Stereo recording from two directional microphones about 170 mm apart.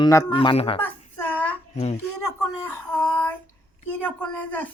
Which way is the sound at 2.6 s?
10° left (ahead or behind).